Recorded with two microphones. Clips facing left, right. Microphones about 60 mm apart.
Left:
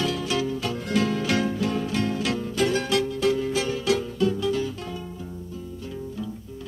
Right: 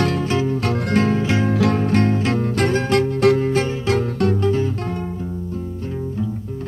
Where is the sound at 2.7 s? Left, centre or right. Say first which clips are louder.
Right 6 dB; right.